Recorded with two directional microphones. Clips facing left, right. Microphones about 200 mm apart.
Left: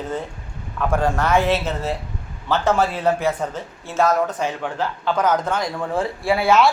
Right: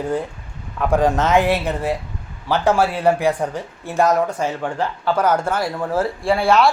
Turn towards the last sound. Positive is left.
turn(degrees=0)  # may be behind; listen again after turning